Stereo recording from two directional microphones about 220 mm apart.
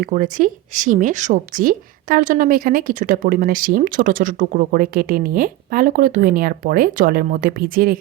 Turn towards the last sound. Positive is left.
turn(degrees=-40)  # may be behind; listen again after turning